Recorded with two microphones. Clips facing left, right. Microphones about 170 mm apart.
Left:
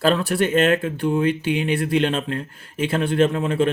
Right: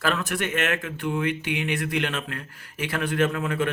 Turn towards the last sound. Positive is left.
turn(degrees=30)  # may be behind; listen again after turning